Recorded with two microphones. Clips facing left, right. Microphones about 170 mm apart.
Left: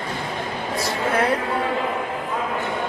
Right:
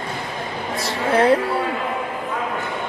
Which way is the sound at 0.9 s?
30° right (ahead or behind).